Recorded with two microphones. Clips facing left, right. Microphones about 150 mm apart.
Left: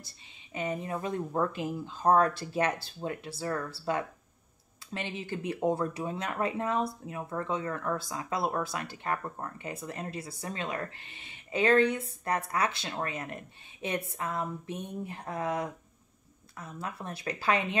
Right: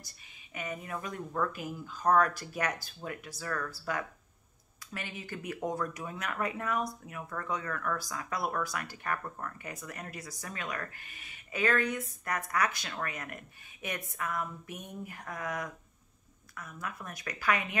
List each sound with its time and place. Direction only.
0.6 s speech: 30° left (ahead or behind)